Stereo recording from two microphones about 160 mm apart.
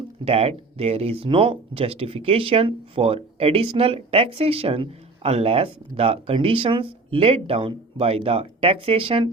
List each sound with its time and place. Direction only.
0.3 s speech: 40° right (ahead or behind)